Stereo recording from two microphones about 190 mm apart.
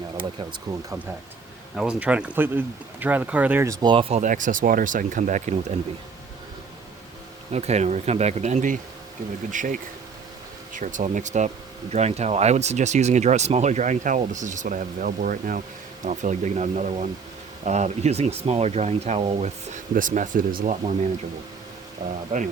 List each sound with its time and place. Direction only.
0.7 s speech: 20° right (ahead or behind)
1.7 s speech: 5° right (ahead or behind); by 4.2 s 25° right (ahead or behind)
4.2 s speech: 40° right (ahead or behind)
7.5 s speech: 35° right (ahead or behind)
22.0 s speech: 20° right (ahead or behind)